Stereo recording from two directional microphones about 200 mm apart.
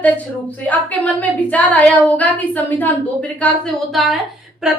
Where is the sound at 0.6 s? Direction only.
5° left (ahead or behind).